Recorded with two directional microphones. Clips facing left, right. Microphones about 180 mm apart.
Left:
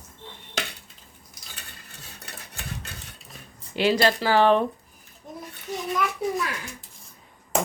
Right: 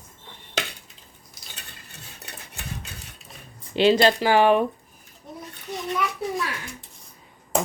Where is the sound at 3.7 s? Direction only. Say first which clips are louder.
Right 4 dB; 25° right (ahead or behind).